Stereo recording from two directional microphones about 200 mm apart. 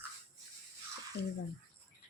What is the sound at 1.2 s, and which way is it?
Speech, 55° left (ahead or behind).